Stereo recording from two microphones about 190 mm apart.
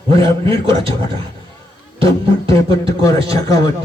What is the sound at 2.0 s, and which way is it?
Speech, 30° right (ahead or behind).